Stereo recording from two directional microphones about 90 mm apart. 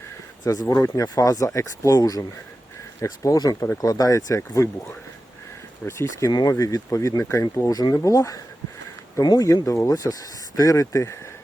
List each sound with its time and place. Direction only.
0.4 s speech: 40° left (ahead or behind)